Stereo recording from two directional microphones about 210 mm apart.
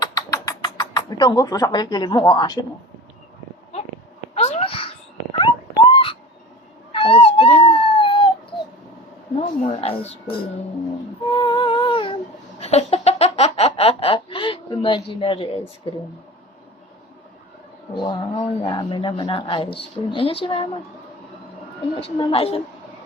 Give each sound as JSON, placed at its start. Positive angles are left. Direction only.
{"t": 0.0, "sound": "a sound", "side_deg": 15}
{"t": 4.4, "sound": "cat", "side_deg": 30}
{"t": 6.9, "sound": "dog", "side_deg": 25}
{"t": 9.6, "sound": "speech", "side_deg": 25}
{"t": 11.3, "sound": "a sound", "side_deg": 20}
{"t": 15.9, "sound": "speech", "side_deg": 25}
{"t": 17.9, "sound": "speech", "side_deg": 20}
{"t": 22.0, "sound": "speech", "side_deg": 25}